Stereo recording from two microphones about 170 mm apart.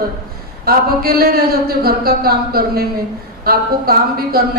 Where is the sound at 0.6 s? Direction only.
65° right (ahead or behind).